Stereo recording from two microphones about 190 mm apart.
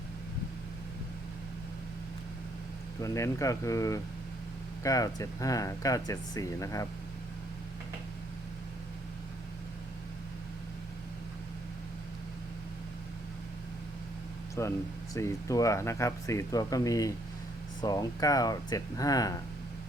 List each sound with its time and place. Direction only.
3.0 s speech: 15° left (ahead or behind)
14.6 s speech: 15° left (ahead or behind)